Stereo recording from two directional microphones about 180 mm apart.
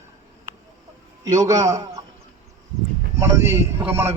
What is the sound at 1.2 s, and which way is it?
Speech, 20° right (ahead or behind).